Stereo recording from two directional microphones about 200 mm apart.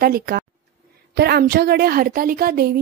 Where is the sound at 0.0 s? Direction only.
50° right (ahead or behind).